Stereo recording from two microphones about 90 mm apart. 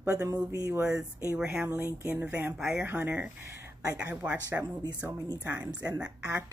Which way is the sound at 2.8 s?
25° right (ahead or behind).